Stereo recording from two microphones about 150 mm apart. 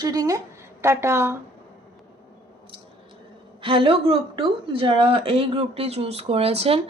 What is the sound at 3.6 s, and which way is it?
A woman's voice, 35° right (ahead or behind).